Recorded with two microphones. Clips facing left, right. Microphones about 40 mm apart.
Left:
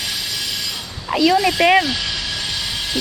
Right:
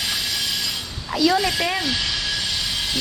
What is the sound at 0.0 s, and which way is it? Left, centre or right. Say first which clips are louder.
Train: even; centre.